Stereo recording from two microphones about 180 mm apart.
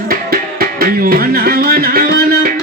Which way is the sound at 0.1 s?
55° right (ahead or behind).